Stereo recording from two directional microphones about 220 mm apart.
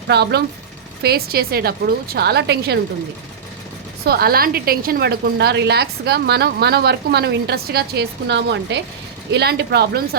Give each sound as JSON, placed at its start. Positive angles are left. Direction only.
{"t": 0.1, "sound": "a woman's voice", "side_deg": -50}
{"t": 4.0, "sound": "a woman's voice", "side_deg": -45}